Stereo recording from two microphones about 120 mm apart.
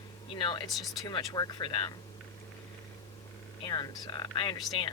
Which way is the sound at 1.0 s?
35° left (ahead or behind).